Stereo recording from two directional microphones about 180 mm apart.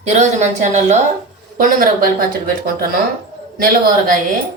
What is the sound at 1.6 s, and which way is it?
Speech, 50° right (ahead or behind).